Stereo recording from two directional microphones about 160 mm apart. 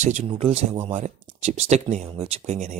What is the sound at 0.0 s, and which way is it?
Speech, 45° right (ahead or behind).